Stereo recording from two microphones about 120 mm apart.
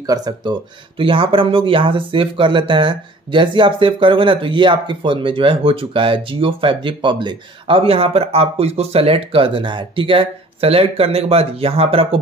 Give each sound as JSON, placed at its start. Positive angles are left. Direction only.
{"t": 0.0, "sound": "speech", "side_deg": -30}